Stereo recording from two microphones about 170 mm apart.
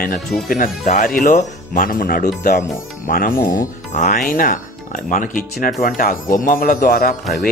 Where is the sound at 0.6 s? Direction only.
45° left (ahead or behind).